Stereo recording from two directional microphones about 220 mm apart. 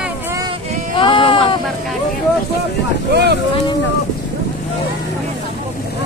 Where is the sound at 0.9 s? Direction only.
25° left (ahead or behind).